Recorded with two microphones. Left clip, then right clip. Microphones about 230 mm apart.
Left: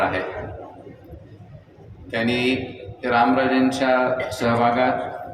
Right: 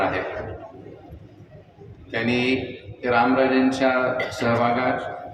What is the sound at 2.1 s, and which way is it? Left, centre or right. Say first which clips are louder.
A man's voice: left 1 dB; left.